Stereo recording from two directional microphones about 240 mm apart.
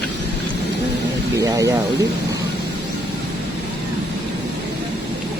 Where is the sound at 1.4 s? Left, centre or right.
Centre.